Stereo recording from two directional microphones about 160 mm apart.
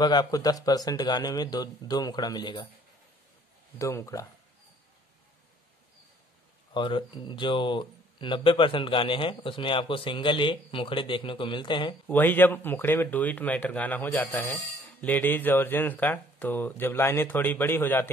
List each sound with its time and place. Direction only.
0.0 s speech: 25° left (ahead or behind)
3.7 s speech: 20° left (ahead or behind)
6.7 s speech: 30° left (ahead or behind)
12.1 s speech: 10° left (ahead or behind)